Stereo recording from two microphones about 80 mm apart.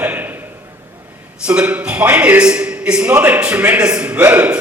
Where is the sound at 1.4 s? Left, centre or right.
Centre.